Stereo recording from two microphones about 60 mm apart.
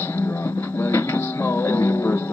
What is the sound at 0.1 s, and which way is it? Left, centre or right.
Music, left.